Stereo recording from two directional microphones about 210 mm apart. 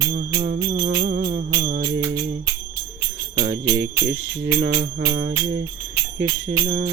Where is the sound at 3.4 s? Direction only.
50° right (ahead or behind).